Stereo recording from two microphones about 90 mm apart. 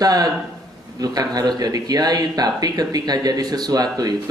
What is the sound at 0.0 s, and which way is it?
Speech, 45° right (ahead or behind).